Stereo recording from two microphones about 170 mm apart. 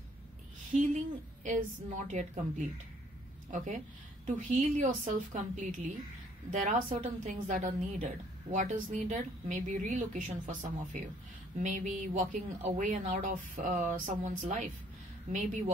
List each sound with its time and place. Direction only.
0.7 s a woman's voice: 45° right (ahead or behind)